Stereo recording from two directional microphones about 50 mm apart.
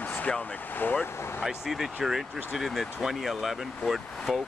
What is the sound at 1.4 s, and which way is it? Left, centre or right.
Speech, centre.